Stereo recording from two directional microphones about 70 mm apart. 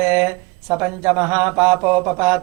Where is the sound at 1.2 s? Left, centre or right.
Right.